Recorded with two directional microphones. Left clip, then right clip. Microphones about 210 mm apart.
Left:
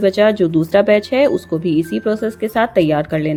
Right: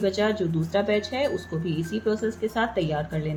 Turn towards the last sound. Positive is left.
turn(degrees=40)  # may be behind; listen again after turning